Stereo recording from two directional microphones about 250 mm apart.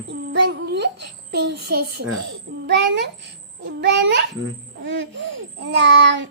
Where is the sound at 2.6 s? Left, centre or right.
Right.